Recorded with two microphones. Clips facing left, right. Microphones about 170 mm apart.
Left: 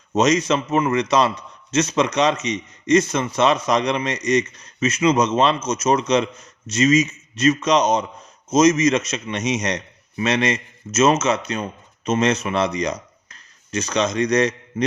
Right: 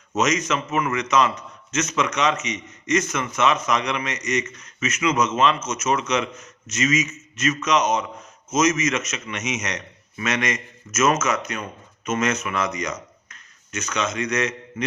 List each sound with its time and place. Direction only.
0.1 s a man's voice: 30° left (ahead or behind)